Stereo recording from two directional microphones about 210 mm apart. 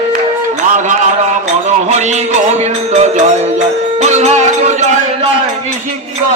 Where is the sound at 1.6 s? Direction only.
35° right (ahead or behind).